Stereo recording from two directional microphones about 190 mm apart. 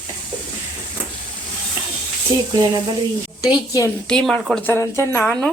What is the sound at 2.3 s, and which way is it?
Sizzle, 20° right (ahead or behind).